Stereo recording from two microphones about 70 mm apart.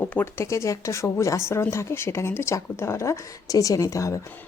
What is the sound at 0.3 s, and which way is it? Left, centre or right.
Speech, left.